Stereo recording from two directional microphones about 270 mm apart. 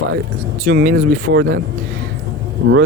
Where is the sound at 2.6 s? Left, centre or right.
Right.